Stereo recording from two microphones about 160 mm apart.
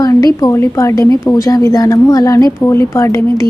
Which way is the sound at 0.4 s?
20° left (ahead or behind).